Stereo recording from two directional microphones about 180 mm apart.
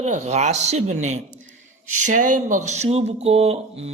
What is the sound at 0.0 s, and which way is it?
Speech, 40° right (ahead or behind).